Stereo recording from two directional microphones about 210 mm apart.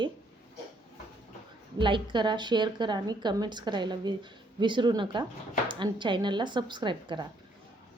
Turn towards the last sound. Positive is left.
turn(degrees=-20)  # may be behind; listen again after turning